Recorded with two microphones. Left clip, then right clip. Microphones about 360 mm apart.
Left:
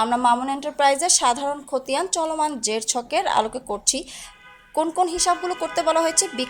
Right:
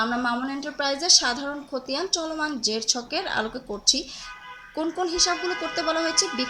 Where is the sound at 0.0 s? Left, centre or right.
Centre.